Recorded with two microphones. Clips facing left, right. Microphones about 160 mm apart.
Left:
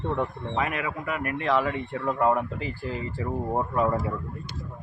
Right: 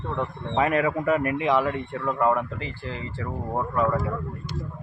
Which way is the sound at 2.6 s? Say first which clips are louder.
Left 2 dB; 40° left (ahead or behind).